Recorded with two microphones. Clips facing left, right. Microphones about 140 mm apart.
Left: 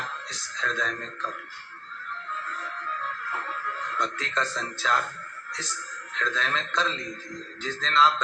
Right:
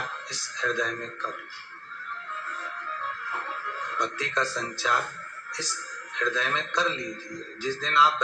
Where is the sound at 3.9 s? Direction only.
15° right (ahead or behind).